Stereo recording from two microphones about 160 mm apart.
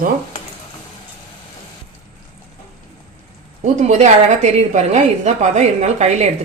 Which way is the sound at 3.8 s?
45° right (ahead or behind).